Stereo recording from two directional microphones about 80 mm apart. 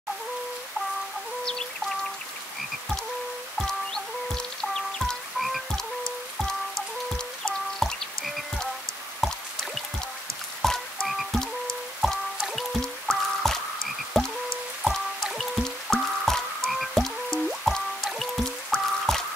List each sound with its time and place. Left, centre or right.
1.4 s music: centre
3.5 s music: centre
7.8 s frog: centre
9.2 s a sound: centre
10.6 s frog: centre
12.0 s music: centre
14.2 s frog: centre
14.8 s music: centre